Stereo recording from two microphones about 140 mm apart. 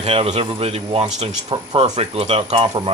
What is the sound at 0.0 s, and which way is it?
Speech, 45° right (ahead or behind).